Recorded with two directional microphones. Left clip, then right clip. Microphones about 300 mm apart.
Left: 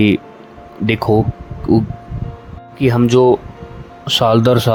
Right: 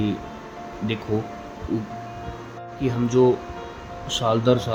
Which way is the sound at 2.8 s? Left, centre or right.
Left.